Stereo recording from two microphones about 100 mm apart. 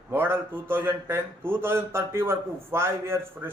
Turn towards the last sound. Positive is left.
turn(degrees=-25)  # may be behind; listen again after turning